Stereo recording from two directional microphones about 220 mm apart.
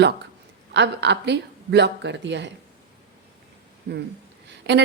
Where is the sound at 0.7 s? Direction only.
50° right (ahead or behind).